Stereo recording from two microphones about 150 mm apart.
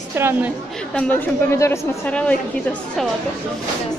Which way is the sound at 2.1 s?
10° left (ahead or behind).